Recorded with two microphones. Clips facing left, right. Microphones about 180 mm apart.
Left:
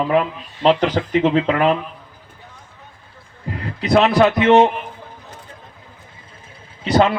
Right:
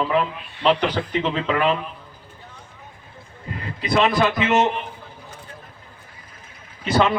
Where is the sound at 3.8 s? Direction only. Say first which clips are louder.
Left 5 dB; 70° left (ahead or behind).